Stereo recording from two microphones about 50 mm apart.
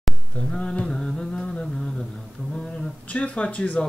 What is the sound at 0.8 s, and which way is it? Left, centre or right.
Music, centre.